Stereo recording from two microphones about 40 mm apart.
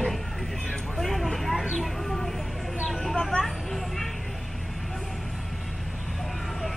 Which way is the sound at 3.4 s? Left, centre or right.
Centre.